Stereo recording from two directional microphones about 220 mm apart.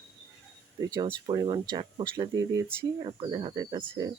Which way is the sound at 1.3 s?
20° right (ahead or behind).